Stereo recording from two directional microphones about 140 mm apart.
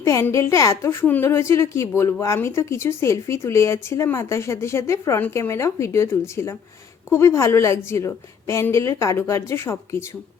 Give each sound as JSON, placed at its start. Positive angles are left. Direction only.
{"t": 0.0, "sound": "a woman's voice", "side_deg": 20}